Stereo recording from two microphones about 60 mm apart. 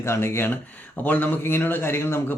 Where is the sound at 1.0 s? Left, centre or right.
Left.